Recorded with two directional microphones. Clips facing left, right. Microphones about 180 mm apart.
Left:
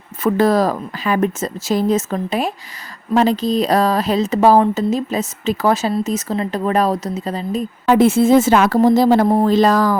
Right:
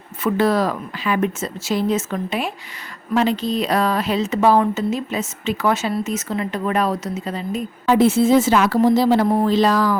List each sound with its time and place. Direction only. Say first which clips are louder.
0.2 s speech: left 3 dB; 40° left (ahead or behind)
7.9 s a woman's voice: left 2 dB; 50° left (ahead or behind)